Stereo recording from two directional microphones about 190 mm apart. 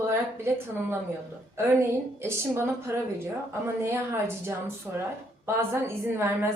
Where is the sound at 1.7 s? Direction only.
15° right (ahead or behind).